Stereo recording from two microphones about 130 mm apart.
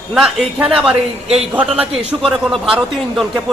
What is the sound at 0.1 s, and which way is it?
A man's voice, 5° right (ahead or behind).